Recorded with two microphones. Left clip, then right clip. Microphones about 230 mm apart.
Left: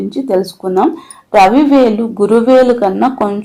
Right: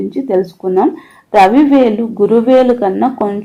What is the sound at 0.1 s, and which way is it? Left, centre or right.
Speech, left.